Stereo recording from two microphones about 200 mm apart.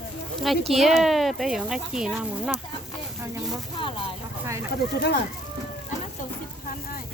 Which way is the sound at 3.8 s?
25° left (ahead or behind).